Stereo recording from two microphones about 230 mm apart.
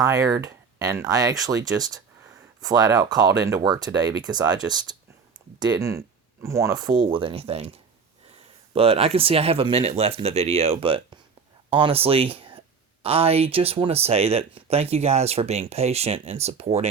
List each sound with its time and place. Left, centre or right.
0.0 s speech: centre
8.7 s speech: right